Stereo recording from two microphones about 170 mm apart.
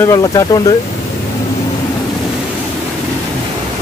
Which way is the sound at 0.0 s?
20° left (ahead or behind).